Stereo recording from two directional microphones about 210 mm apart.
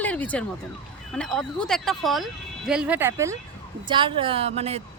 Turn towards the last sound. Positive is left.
turn(degrees=-30)  # may be behind; listen again after turning